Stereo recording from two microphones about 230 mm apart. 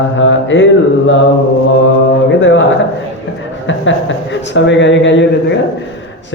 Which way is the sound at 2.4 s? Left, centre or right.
Left.